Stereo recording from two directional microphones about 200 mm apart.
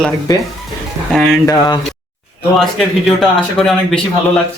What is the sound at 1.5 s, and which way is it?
Speech, 20° left (ahead or behind).